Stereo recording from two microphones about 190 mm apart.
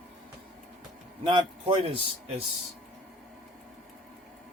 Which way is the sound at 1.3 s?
25° right (ahead or behind).